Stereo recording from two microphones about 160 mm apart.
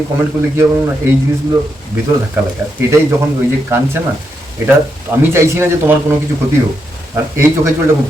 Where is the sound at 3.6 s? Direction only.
15° right (ahead or behind).